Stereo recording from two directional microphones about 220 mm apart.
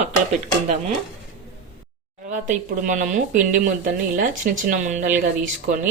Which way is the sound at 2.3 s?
35° right (ahead or behind).